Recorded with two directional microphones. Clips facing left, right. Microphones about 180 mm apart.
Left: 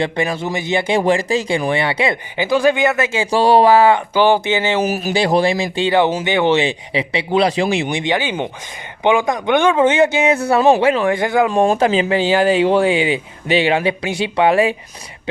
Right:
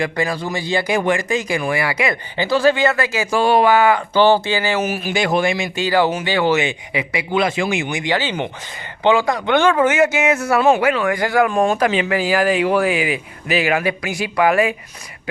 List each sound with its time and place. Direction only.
0.0 s speech: 25° left (ahead or behind)
2.4 s speech: 15° left (ahead or behind)
4.1 s speech: 15° left (ahead or behind)
4.8 s speech: 40° left (ahead or behind)
8.0 s speech: 15° left (ahead or behind)
9.8 s speech: 30° left (ahead or behind)
11.6 s speech: 30° left (ahead or behind)